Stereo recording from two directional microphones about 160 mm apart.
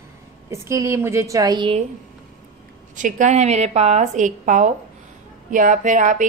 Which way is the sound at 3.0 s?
50° right (ahead or behind).